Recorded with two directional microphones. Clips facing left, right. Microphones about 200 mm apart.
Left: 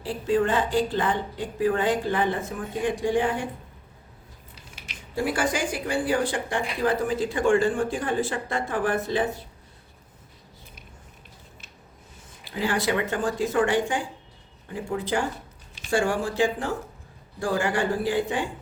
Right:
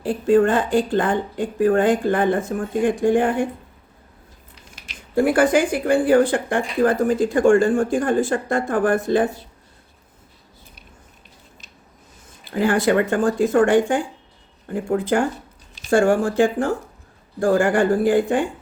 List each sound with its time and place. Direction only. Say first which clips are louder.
0.0 s speech: right 7 dB; 50° right (ahead or behind)
4.7 s speech: right 10 dB; 50° right (ahead or behind)
12.5 s speech: right 7 dB; 50° right (ahead or behind)